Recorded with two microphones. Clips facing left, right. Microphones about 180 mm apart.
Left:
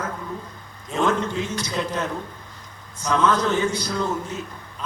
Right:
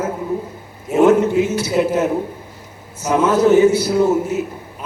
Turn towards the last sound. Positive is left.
turn(degrees=-10)  # may be behind; listen again after turning